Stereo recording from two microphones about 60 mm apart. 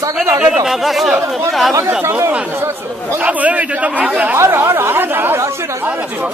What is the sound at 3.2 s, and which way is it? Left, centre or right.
Speech, right.